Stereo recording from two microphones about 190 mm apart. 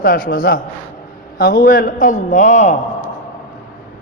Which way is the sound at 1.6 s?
45° left (ahead or behind).